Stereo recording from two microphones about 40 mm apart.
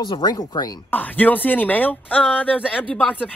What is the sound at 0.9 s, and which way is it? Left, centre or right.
Speech, left.